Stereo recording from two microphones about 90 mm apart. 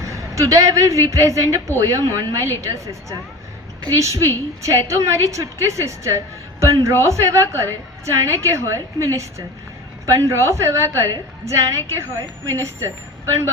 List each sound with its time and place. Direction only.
0.0 s a woman's voice: 35° right (ahead or behind)